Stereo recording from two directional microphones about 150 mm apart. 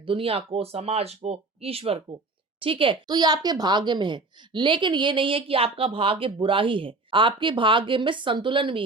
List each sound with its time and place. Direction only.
0.0 s a woman's voice: 35° right (ahead or behind)